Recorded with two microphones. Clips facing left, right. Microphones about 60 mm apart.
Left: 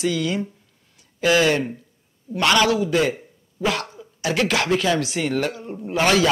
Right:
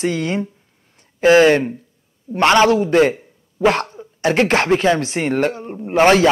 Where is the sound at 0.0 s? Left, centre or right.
Right.